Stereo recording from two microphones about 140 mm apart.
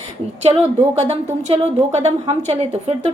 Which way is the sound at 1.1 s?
45° right (ahead or behind).